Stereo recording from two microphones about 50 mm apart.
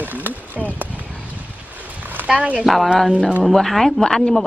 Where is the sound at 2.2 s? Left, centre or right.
Right.